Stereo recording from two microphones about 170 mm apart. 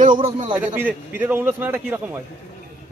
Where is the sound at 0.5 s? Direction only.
10° right (ahead or behind).